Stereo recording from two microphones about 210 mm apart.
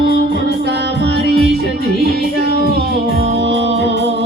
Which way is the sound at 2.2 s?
50° left (ahead or behind).